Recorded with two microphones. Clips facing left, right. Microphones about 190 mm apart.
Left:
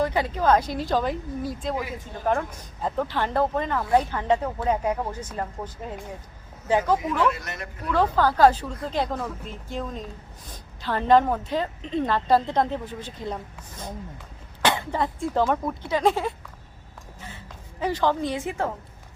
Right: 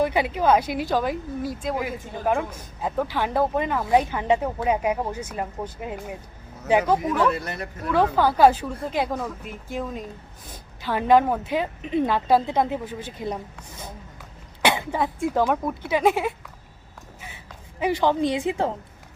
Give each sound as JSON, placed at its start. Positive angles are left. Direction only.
{"t": 0.0, "sound": "speech", "side_deg": -10}
{"t": 7.3, "sound": "a man's voice", "side_deg": -30}
{"t": 7.9, "sound": "speech", "side_deg": -15}
{"t": 14.6, "sound": "speech", "side_deg": -10}
{"t": 17.2, "sound": "a sound", "side_deg": -10}